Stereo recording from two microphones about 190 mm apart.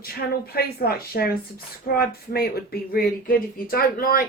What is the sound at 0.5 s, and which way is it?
Speech, 55° left (ahead or behind).